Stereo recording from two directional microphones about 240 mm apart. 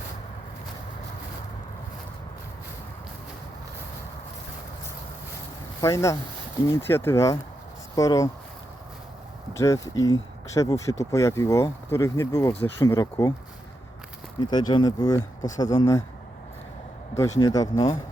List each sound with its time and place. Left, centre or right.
5.8 s speech: centre
9.5 s speech: centre
14.3 s speech: centre
17.4 s speech: centre